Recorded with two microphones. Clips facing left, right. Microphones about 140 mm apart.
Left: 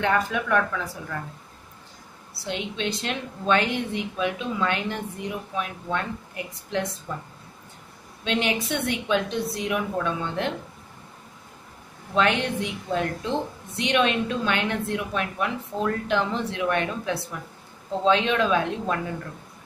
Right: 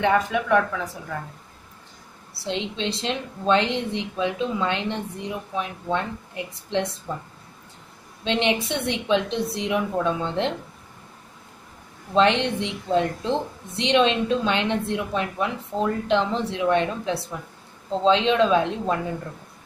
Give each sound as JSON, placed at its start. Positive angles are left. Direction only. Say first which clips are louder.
{"t": 0.0, "sound": "speech", "louder": "right 3 dB", "side_deg": -15}
{"t": 2.4, "sound": "speech", "louder": "right 2 dB", "side_deg": -25}
{"t": 12.1, "sound": "speech", "louder": "right 4 dB", "side_deg": -25}